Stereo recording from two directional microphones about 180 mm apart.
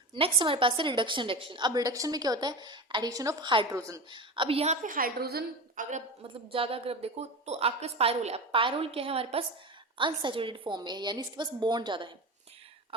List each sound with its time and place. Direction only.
0.1 s a woman's voice: 25° right (ahead or behind); by 6.0 s 45° right (ahead or behind)
6.2 s a woman's voice: 30° right (ahead or behind)